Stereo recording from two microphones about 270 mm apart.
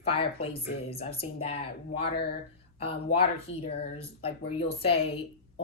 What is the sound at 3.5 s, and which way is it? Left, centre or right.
Speech, left.